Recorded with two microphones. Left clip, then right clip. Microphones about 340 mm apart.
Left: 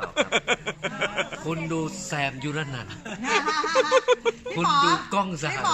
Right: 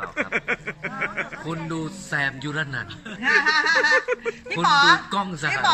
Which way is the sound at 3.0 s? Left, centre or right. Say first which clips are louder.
Right 5 dB; left.